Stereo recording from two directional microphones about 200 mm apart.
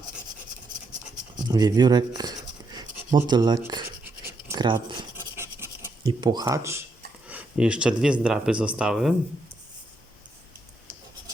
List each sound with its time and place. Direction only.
1.4 s speech: 20° right (ahead or behind)
2.7 s rub: 20° right (ahead or behind)
4.0 s scratch: 10° right (ahead or behind)
5.4 s scratch: 10° right (ahead or behind)
6.1 s speech: 20° right (ahead or behind); by 9.1 s centre (ahead or behind)